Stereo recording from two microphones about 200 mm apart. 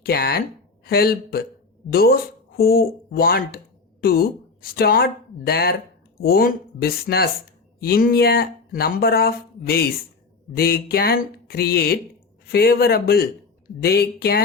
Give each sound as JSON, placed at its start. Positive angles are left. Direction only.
{"t": 0.0, "sound": "speech", "side_deg": 50}